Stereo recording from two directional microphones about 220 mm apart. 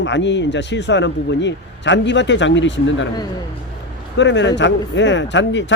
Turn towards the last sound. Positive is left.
turn(degrees=55)  # may be behind; listen again after turning